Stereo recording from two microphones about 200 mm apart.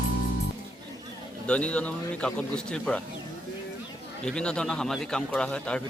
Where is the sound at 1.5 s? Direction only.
5° left (ahead or behind).